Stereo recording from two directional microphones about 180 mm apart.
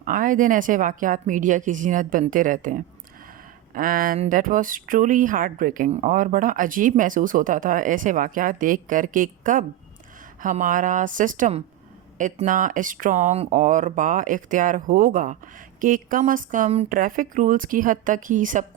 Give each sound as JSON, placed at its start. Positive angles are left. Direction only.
{"t": 0.0, "sound": "speech", "side_deg": -50}